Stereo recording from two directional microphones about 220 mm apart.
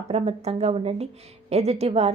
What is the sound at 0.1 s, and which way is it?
A woman's voice, 30° right (ahead or behind).